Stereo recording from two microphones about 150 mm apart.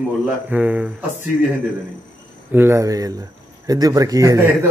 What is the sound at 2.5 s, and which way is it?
Speech, 15° right (ahead or behind).